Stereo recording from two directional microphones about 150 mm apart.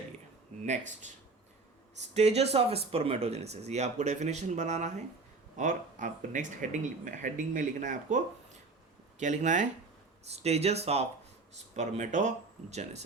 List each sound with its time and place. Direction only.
0.6 s speech: 50° right (ahead or behind)